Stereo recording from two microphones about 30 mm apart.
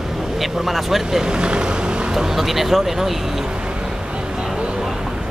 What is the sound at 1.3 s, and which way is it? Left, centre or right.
Vehicle, right.